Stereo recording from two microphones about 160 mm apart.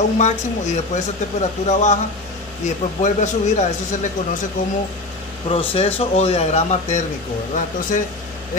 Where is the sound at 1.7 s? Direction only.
45° left (ahead or behind).